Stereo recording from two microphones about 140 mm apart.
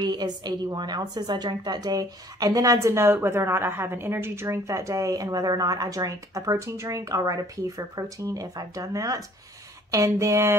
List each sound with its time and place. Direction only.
0.0 s a woman's voice: 30° right (ahead or behind)